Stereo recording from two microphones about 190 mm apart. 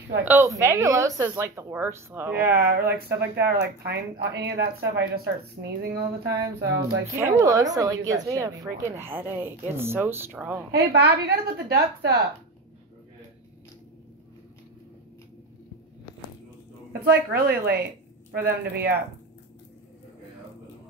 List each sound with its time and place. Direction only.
0.2 s speech: 10° right (ahead or behind)
2.4 s speech: 55° right (ahead or behind)
3.1 s speech: 10° right (ahead or behind)
3.4 s speech: 60° right (ahead or behind)
7.2 s speech: 15° right (ahead or behind)
10.7 s speech: 60° right (ahead or behind)
17.1 s speech: 55° right (ahead or behind)